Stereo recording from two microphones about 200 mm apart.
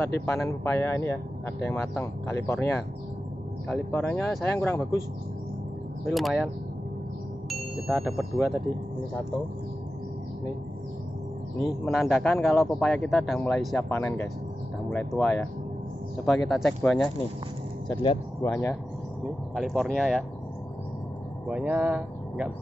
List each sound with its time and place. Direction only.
0.0 s speech: 10° left (ahead or behind)
6.1 s a man's voice: centre (ahead or behind)
11.8 s a man's voice: centre (ahead or behind)
13.8 s a man's voice: 10° left (ahead or behind)
17.8 s speech: 25° left (ahead or behind)
18.4 s speech: 10° left (ahead or behind)
19.5 s a man's voice: centre (ahead or behind)
21.5 s speech: 5° right (ahead or behind)